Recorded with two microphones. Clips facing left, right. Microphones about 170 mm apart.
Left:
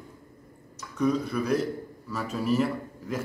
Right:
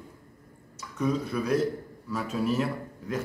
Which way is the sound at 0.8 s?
5° right (ahead or behind).